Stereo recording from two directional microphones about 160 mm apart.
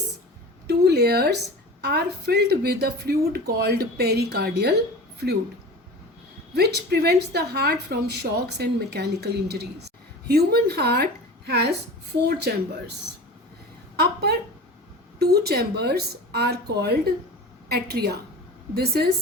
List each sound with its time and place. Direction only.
0.7 s a sound: 85° right
1.8 s a woman's voice: 85° right
6.5 s speech: 90° right
13.9 s a woman's voice: 90° right